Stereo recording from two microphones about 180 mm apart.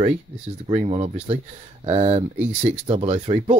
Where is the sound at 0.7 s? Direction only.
30° right (ahead or behind).